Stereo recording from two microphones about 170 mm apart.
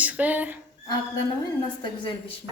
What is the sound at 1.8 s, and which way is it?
Speech, 30° left (ahead or behind).